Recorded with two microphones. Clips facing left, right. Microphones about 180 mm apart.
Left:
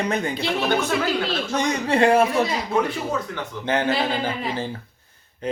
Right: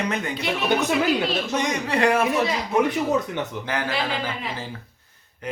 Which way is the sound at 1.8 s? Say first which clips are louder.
Left 4 dB; 25° left (ahead or behind).